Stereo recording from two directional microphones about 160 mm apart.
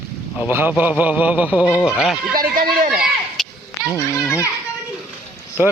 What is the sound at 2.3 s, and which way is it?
Speech, 65° right (ahead or behind).